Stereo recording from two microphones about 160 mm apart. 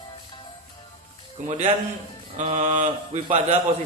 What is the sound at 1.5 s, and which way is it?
Speech, 45° right (ahead or behind).